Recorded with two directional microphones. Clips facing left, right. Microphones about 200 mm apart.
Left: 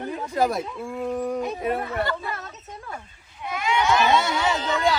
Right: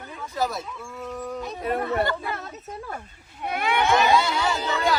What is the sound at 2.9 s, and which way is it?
Speech, 55° right (ahead or behind).